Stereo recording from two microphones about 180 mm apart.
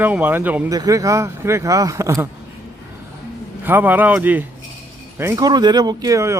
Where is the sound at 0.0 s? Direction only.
10° right (ahead or behind).